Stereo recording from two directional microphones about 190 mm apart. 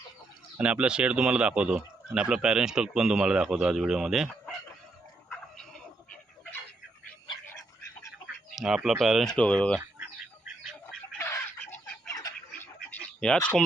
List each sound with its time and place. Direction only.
0.6 s speech: 5° right (ahead or behind)
8.5 s speech: centre (ahead or behind)
11.2 s bird: 10° left (ahead or behind)
13.1 s speech: 5° left (ahead or behind)